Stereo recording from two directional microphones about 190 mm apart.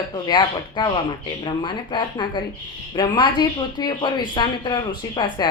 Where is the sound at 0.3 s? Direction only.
20° left (ahead or behind).